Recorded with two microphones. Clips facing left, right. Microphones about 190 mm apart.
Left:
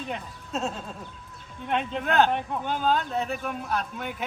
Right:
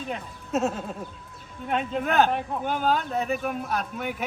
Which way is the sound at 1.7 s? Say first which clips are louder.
Right 1 dB; centre (ahead or behind).